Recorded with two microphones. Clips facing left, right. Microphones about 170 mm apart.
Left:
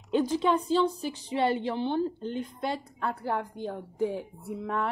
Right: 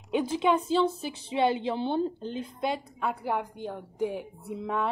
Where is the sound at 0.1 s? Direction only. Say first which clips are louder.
Even; 15° right (ahead or behind).